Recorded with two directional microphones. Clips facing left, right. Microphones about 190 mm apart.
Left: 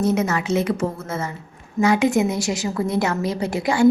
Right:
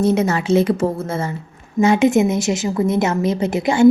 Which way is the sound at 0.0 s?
30° right (ahead or behind).